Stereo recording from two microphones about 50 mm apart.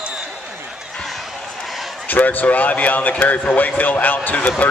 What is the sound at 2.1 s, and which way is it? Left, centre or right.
Speech, left.